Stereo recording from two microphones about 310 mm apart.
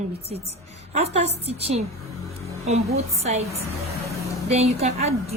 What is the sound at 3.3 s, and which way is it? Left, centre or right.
Speech, centre.